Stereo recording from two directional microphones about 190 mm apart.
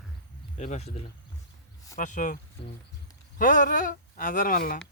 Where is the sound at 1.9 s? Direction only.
40° left (ahead or behind).